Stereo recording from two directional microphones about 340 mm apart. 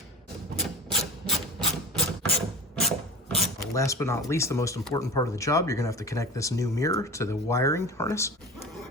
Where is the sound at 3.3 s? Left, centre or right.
Centre.